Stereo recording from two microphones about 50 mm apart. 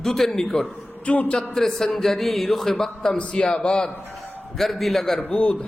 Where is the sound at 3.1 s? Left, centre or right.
Left.